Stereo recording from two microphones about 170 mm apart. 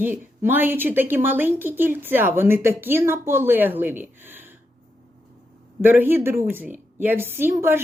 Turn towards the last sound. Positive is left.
turn(degrees=-15)  # may be behind; listen again after turning